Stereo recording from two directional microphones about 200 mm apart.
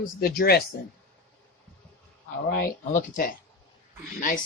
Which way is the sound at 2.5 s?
40° left (ahead or behind).